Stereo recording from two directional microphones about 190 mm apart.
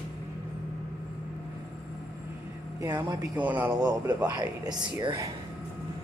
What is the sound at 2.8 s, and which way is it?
Speech, 20° right (ahead or behind).